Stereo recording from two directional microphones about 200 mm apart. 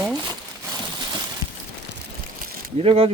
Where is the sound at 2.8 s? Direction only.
30° right (ahead or behind).